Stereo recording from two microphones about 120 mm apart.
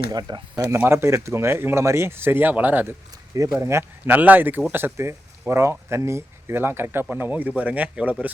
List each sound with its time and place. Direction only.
0.1 s speech: 35° right (ahead or behind); by 2.9 s 15° right (ahead or behind)
3.3 s speech: 25° right (ahead or behind); by 8.1 s 10° right (ahead or behind)